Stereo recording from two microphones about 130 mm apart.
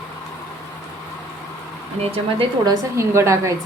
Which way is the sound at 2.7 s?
20° right (ahead or behind).